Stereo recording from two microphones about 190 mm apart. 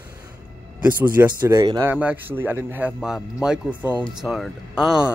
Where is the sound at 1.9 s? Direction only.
10° right (ahead or behind).